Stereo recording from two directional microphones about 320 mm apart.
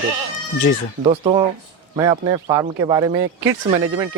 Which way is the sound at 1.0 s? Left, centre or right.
Centre.